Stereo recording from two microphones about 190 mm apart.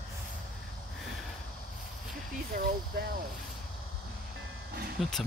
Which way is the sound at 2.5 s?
50° right (ahead or behind).